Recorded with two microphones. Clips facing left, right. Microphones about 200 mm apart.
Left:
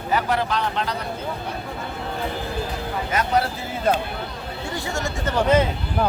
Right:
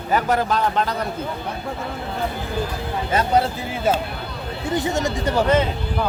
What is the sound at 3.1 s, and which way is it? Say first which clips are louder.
Speech: right 3 dB; 30° right (ahead or behind).